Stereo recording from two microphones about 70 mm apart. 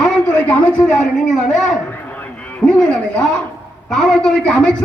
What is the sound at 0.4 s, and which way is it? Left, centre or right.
Speech, centre.